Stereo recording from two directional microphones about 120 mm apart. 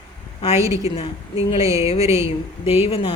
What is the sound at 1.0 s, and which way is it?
Speech, 55° left (ahead or behind).